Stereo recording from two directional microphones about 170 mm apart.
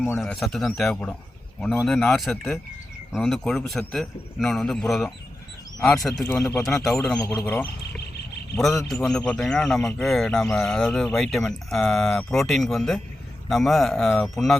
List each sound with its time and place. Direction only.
0.2 s a man's voice: centre (ahead or behind)
7.2 s speech: 20° left (ahead or behind)
7.8 s a sound: 75° left (ahead or behind)
8.5 s a man's voice: centre (ahead or behind)